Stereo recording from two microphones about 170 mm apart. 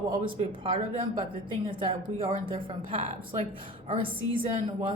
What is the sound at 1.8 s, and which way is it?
Speech, 30° right (ahead or behind).